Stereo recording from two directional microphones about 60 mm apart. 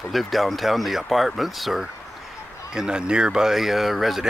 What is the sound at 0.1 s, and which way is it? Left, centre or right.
Speech, centre.